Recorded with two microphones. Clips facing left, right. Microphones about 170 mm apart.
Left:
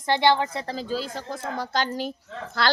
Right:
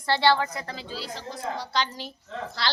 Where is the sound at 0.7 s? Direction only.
45° left (ahead or behind).